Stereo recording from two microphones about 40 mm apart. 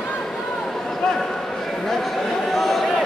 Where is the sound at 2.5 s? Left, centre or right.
Centre.